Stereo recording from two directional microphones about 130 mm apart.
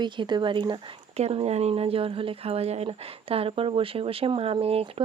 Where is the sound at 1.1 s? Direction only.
50° right (ahead or behind).